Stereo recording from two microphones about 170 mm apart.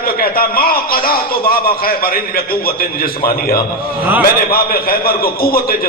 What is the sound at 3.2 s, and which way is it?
A man's voice, 60° left (ahead or behind).